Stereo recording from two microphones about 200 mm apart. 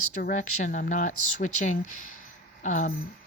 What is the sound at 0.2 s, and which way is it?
Speech, 40° left (ahead or behind).